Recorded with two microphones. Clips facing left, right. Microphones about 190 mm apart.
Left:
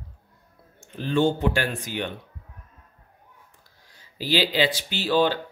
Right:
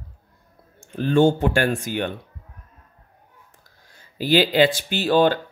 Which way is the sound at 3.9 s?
50° right (ahead or behind).